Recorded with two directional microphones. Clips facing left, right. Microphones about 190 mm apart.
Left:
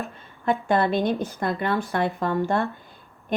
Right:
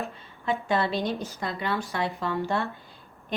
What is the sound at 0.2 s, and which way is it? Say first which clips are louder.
A woman's voice: left 8 dB; 50° left (ahead or behind).